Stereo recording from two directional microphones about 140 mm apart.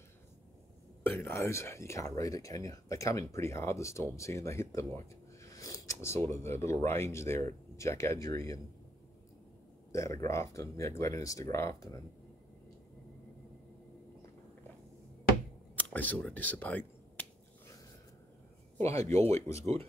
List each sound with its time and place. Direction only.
1.0 s speech: 15° left (ahead or behind)
9.9 s speech: 20° left (ahead or behind)
15.7 s finger snapping: 10° left (ahead or behind)
18.8 s speech: 20° left (ahead or behind)